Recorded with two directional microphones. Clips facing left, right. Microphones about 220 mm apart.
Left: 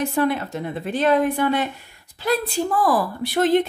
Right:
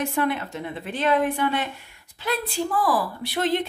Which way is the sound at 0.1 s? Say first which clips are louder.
Left 4 dB; 40° left (ahead or behind).